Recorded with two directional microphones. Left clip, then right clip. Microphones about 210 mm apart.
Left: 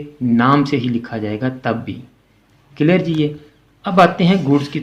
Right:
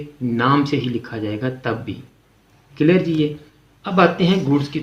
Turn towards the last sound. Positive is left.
turn(degrees=40)  # may be behind; listen again after turning